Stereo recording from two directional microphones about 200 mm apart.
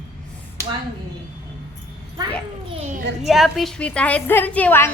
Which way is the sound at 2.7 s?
35° right (ahead or behind).